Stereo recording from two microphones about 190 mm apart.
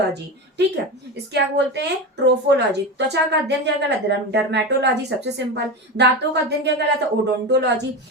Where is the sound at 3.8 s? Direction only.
65° right (ahead or behind).